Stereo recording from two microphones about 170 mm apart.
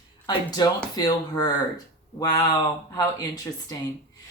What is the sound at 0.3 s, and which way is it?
Speech, 25° left (ahead or behind).